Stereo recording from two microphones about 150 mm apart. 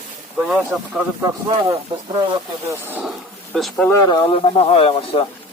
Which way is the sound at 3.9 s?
20° left (ahead or behind).